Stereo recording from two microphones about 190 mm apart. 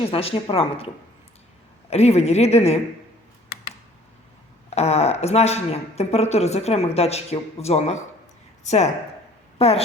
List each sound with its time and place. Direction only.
0.1 s a woman's voice: 30° left (ahead or behind)
1.9 s speech: 35° left (ahead or behind)
4.7 s a woman's voice: 35° left (ahead or behind)